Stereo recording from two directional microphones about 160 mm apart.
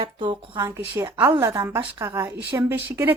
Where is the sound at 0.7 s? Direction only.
15° right (ahead or behind).